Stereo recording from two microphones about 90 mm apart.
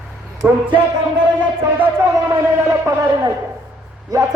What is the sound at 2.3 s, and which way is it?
A man's voice, 30° right (ahead or behind).